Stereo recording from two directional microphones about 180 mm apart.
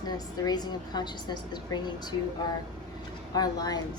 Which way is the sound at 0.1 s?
20° left (ahead or behind).